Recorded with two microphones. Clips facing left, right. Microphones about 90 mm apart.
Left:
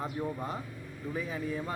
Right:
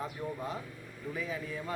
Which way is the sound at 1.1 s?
30° left (ahead or behind).